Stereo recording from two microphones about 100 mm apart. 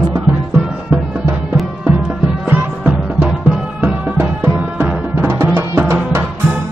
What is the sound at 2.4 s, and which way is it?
Music, 15° right (ahead or behind).